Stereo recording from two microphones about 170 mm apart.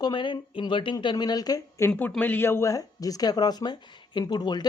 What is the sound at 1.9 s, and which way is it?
Speech, 10° left (ahead or behind).